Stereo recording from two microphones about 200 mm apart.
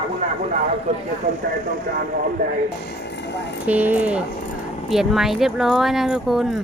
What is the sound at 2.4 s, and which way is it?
Speech, 35° right (ahead or behind).